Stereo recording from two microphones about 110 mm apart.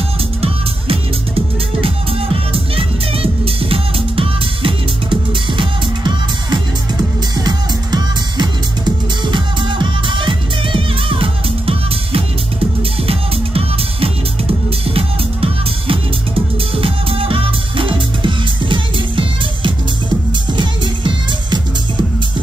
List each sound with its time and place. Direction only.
0.4 s music: 60° right (ahead or behind)